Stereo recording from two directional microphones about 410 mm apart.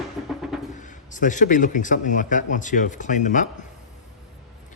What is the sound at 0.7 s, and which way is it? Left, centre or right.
Speech, centre.